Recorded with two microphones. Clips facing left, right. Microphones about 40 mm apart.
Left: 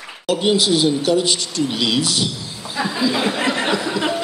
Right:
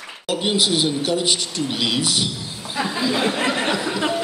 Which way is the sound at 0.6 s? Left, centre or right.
Right.